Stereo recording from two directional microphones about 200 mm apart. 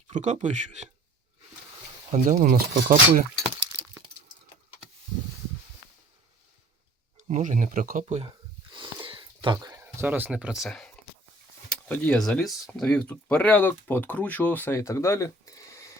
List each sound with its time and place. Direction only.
0.1 s speech: 35° right (ahead or behind)
2.1 s speech: 40° right (ahead or behind)
3.3 s breaking: 5° right (ahead or behind)
7.2 s speech: 35° right (ahead or behind)
8.0 s speech: 30° right (ahead or behind)
8.7 s sniff: 25° right (ahead or behind)
9.8 s speech: 10° right (ahead or behind); by 16.0 s 15° left (ahead or behind)